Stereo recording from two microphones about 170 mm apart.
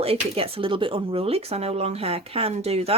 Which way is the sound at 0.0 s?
35° right (ahead or behind).